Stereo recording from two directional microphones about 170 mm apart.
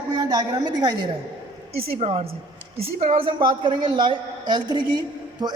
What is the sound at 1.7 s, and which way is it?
A man's voice, 35° right (ahead or behind).